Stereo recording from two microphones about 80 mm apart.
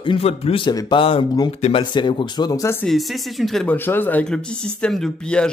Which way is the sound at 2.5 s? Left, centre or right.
Left.